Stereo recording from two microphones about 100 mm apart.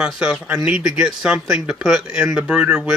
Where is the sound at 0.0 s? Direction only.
10° right (ahead or behind).